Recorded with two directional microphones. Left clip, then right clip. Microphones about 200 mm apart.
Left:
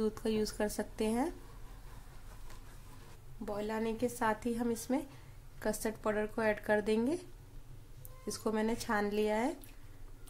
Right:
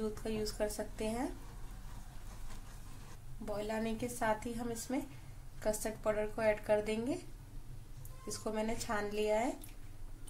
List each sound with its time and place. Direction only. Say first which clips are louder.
0.0 s speech: left 5 dB; 40° left (ahead or behind)
3.4 s a woman's voice: left 2 dB; 25° left (ahead or behind)
8.3 s speech: left 3 dB; 30° left (ahead or behind)